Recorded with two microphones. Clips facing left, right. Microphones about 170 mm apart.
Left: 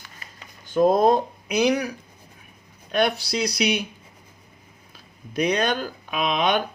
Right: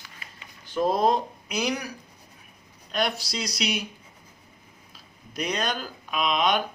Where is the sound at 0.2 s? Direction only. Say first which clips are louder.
Left 2 dB; 45° left (ahead or behind); by 1.9 s 60° left (ahead or behind).